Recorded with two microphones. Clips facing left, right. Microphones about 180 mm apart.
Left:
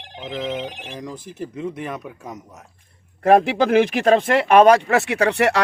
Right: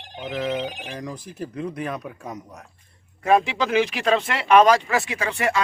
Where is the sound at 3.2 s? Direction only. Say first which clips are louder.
Left 5 dB; 55° left (ahead or behind).